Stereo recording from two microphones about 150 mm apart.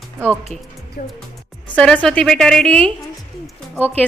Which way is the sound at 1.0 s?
80° left.